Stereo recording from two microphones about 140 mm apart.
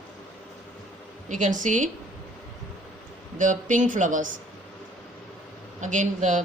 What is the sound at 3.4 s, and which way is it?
Speech, 65° right (ahead or behind).